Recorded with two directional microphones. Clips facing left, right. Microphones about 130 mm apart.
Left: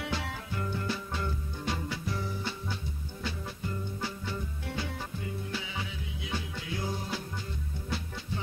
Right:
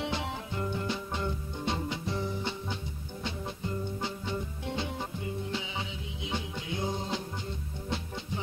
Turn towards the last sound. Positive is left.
turn(degrees=-20)  # may be behind; listen again after turning